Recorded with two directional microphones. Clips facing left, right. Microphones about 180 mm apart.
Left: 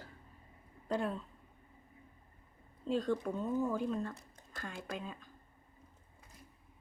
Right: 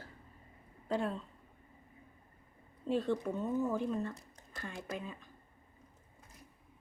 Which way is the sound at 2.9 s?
10° right (ahead or behind).